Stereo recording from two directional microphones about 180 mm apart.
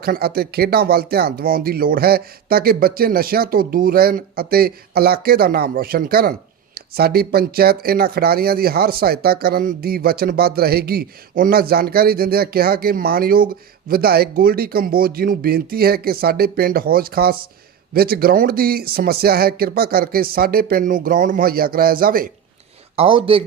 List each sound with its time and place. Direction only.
0.0 s speech: 60° right (ahead or behind)
23.0 s speech: 30° right (ahead or behind)